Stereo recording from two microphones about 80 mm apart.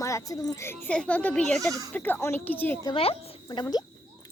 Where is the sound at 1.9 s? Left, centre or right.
Left.